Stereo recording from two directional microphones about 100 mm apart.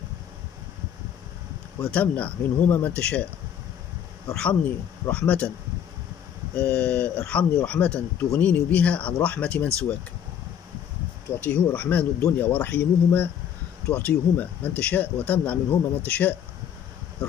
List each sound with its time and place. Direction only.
1.9 s speech: 15° left (ahead or behind)
4.4 s speech: 15° left (ahead or behind)
6.6 s speech: 15° left (ahead or behind)
11.4 s speech: 15° left (ahead or behind)